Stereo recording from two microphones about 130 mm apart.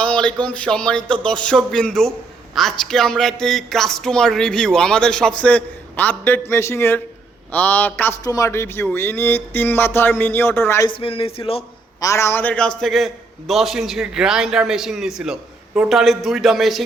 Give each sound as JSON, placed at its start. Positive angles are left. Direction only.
{"t": 0.0, "sound": "a sound", "side_deg": 10}
{"t": 0.4, "sound": "speech", "side_deg": 10}
{"t": 8.2, "sound": "speech", "side_deg": 25}
{"t": 10.8, "sound": "speech", "side_deg": 45}
{"t": 11.9, "sound": "speech", "side_deg": 25}